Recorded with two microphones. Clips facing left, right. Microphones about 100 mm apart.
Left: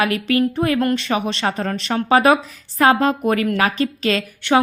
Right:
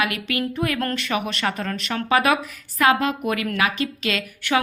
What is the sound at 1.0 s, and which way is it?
A woman's voice, 30° left (ahead or behind).